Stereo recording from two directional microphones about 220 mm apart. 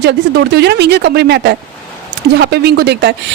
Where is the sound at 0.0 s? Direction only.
50° right (ahead or behind).